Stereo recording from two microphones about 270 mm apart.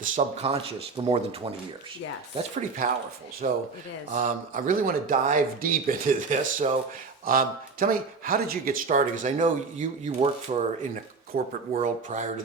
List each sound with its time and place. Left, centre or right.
0.0 s speech: right
2.4 s speech: right